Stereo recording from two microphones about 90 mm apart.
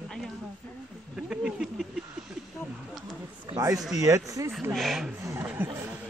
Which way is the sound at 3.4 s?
50° right (ahead or behind).